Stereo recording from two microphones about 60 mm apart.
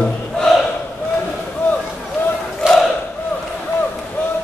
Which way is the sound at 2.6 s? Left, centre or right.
Centre.